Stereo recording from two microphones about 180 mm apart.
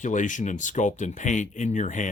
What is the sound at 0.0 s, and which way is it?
Speech, 45° left (ahead or behind).